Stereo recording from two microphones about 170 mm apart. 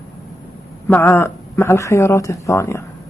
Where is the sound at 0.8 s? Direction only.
10° left (ahead or behind).